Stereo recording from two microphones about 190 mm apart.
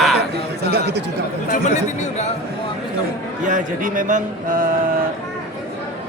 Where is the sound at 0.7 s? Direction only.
60° right (ahead or behind).